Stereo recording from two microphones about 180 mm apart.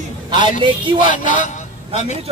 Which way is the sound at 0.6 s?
25° right (ahead or behind).